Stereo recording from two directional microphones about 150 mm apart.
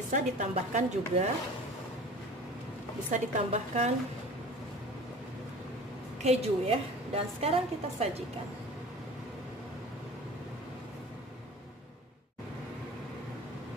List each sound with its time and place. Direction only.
0.1 s a woman's voice: 50° right (ahead or behind)
3.1 s a woman's voice: 55° right (ahead or behind)
6.2 s a woman's voice: 40° right (ahead or behind)